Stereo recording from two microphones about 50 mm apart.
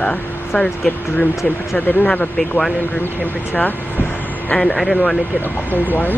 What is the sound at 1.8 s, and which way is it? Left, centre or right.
Speech, left.